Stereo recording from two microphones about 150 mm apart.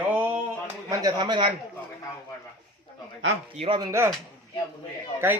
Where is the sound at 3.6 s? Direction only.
35° right (ahead or behind).